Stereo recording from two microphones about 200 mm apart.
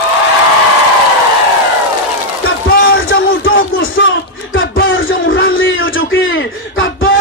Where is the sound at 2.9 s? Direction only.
85° left.